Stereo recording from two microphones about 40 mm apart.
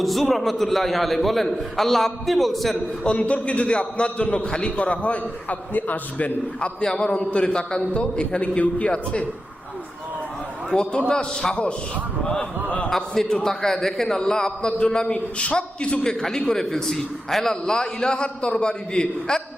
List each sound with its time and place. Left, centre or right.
0.0 s a man's voice: centre
3.2 s a man's voice: left
6.8 s a man's voice: left
10.7 s a man's voice: left